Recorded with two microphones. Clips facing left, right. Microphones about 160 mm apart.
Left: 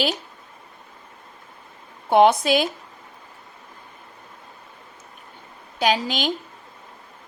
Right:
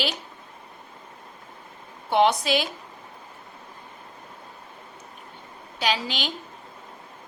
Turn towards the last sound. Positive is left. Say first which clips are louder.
# left 5 dB
turn(degrees=45)  # may be behind; listen again after turning